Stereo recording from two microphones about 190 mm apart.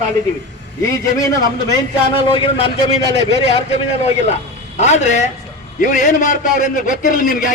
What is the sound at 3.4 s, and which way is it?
A man's voice, 30° left (ahead or behind).